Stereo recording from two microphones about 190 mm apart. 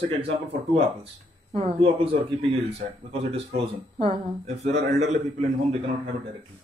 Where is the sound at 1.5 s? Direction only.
30° right (ahead or behind).